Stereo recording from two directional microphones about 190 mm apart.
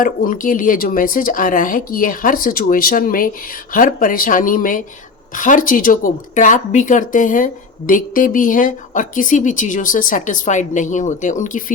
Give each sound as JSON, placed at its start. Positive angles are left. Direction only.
{"t": 0.0, "sound": "speech", "side_deg": 45}